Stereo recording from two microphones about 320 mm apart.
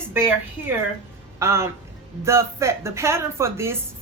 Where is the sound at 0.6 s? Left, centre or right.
Left.